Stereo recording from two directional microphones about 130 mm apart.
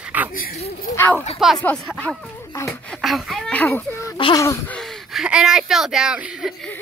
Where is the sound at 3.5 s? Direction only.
15° left (ahead or behind).